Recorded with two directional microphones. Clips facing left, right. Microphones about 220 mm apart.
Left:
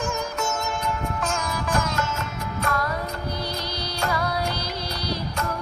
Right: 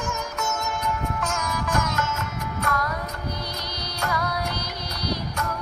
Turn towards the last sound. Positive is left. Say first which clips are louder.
# even
turn(degrees=30)  # may be behind; listen again after turning